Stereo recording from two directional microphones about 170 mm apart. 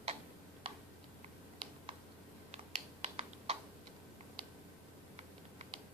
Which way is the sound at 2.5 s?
40° right (ahead or behind).